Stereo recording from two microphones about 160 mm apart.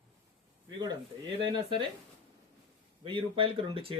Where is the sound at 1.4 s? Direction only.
30° right (ahead or behind).